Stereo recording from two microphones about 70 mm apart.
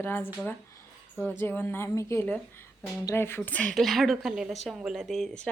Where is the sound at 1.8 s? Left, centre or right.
Left.